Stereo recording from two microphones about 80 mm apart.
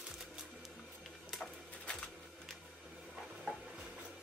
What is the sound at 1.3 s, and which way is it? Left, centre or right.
Printer, centre.